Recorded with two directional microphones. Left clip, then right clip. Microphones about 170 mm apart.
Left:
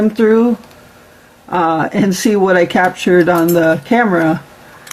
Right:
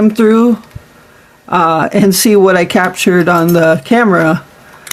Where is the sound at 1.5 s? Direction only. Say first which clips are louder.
Right 4 dB; 75° right (ahead or behind).